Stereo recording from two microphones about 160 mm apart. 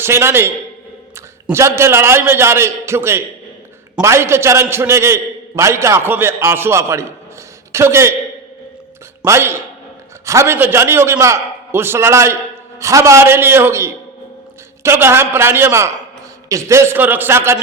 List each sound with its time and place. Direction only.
0.0 s a man's voice: 15° right (ahead or behind)
9.2 s a man's voice: 15° right (ahead or behind)